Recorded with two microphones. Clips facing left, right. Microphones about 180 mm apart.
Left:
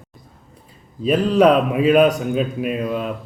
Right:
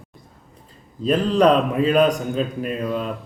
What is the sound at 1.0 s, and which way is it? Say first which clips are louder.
A man's voice: left 2 dB; 10° left (ahead or behind).